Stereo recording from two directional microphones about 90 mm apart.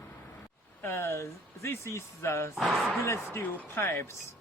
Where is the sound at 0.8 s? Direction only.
25° left (ahead or behind).